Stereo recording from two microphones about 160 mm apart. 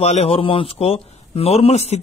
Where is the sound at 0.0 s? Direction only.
40° left (ahead or behind).